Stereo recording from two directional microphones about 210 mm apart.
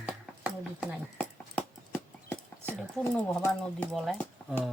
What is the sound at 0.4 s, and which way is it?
Clip-clop, 5° right (ahead or behind).